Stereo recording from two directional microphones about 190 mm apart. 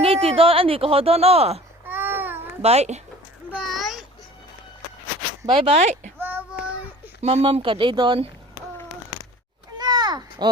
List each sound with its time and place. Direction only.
0.0 s a woman's voice: 30° right (ahead or behind)
1.9 s babbling: 10° right (ahead or behind)
2.6 s speech: 35° right (ahead or behind)
3.6 s a child's voice: centre (ahead or behind)
5.5 s speech: 30° right (ahead or behind)
6.1 s child singing: 10° right (ahead or behind)
7.2 s a woman's voice: 35° right (ahead or behind)
9.7 s a sound: 20° right (ahead or behind)